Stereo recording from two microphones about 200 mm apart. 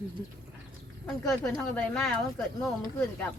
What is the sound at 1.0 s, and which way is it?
Speech, 5° left (ahead or behind).